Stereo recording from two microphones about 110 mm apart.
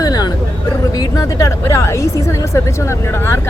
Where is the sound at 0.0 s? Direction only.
35° left (ahead or behind).